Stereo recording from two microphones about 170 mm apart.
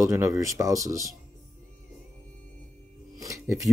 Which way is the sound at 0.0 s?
15° right (ahead or behind).